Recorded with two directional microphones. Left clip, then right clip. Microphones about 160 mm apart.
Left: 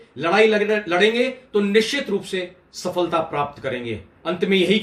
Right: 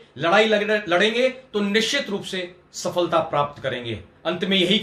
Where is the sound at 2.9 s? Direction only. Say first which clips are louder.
Right 1 dB; 15° right (ahead or behind).